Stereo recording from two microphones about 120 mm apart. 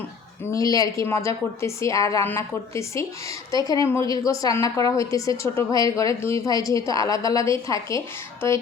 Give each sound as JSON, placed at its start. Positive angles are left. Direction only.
{"t": 0.5, "sound": "a woman's voice", "side_deg": 30}